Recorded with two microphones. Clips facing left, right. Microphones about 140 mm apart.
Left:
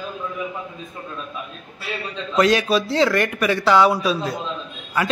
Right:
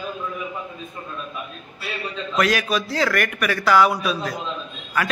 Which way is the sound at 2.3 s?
25° left (ahead or behind).